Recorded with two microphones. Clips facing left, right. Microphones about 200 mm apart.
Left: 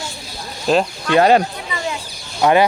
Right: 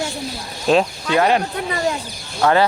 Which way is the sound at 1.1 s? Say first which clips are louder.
Left 4 dB; 35° left (ahead or behind).